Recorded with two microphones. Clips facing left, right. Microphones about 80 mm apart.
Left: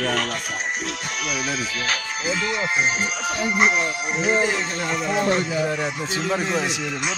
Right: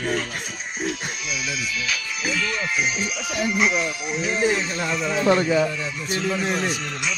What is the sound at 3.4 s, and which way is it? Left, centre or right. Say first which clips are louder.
Speech: left 1 dB; left.